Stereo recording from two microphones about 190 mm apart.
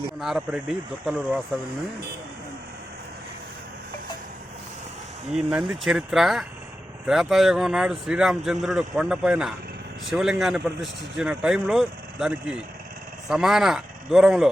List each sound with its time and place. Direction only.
0.2 s speech: 5° right (ahead or behind)
5.3 s speech: 5° right (ahead or behind)